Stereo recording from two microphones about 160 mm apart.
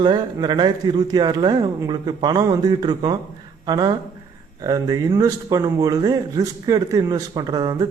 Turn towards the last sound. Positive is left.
turn(degrees=-25)  # may be behind; listen again after turning